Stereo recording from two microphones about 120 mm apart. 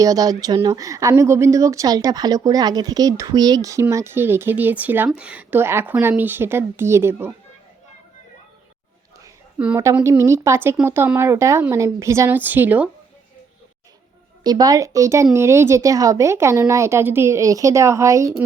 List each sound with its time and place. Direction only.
0.0 s speech: 30° right (ahead or behind)
9.6 s a woman's voice: 10° right (ahead or behind)
10.0 s a woman's voice: 25° right (ahead or behind)
14.4 s speech: 35° right (ahead or behind)